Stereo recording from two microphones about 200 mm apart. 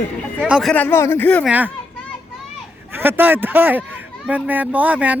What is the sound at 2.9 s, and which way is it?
Speech, 10° right (ahead or behind).